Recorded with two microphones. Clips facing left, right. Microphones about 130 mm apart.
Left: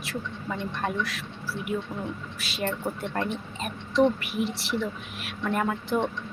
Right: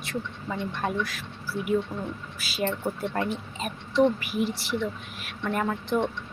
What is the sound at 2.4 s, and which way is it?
Speech, centre (ahead or behind).